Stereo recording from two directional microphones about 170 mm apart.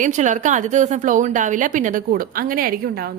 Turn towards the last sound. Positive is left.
turn(degrees=-60)  # may be behind; listen again after turning